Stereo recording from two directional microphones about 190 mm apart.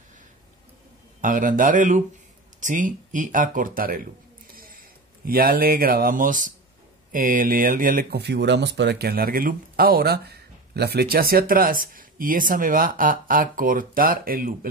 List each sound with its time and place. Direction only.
1.2 s speech: 45° right (ahead or behind)